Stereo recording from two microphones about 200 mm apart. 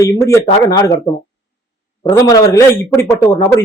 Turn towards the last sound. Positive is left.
turn(degrees=15)  # may be behind; listen again after turning